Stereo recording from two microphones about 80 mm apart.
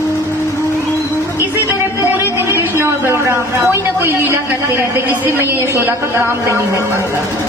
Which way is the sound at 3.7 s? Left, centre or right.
Right.